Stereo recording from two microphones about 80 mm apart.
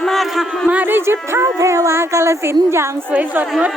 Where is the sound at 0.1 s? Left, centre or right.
Centre.